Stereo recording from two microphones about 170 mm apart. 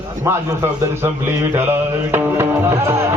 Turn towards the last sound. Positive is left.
turn(degrees=-15)  # may be behind; listen again after turning